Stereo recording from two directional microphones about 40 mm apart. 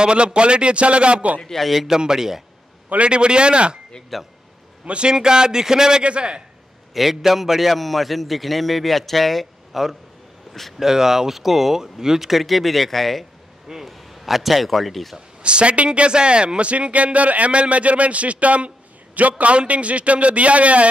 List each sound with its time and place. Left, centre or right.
0.0 s a man's voice: right
1.4 s a man's voice: centre
1.7 s a man's voice: centre
3.0 s a man's voice: right
4.1 s a man's voice: centre
4.8 s a man's voice: right
5.1 s speech: centre
6.0 s a man's voice: right
6.9 s a man's voice: centre
15.4 s a man's voice: right